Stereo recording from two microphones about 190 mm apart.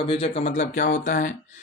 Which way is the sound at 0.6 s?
40° left (ahead or behind).